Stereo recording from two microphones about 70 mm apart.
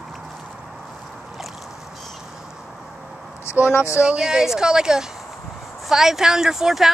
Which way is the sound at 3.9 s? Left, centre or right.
Centre.